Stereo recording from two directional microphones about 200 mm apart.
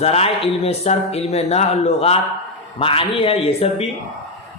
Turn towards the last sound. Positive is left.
turn(degrees=30)  # may be behind; listen again after turning